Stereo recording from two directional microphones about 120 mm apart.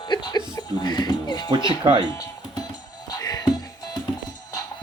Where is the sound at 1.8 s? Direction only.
40° right (ahead or behind).